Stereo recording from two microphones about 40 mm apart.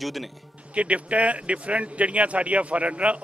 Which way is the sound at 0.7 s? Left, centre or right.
Right.